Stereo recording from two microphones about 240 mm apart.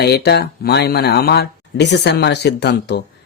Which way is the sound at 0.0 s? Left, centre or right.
Left.